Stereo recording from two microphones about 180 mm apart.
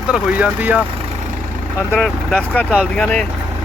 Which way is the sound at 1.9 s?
Centre (ahead or behind).